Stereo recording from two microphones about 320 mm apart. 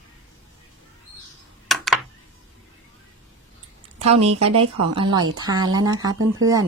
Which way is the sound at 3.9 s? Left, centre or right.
Right.